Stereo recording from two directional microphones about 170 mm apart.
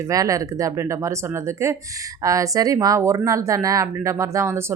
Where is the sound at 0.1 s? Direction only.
20° right (ahead or behind).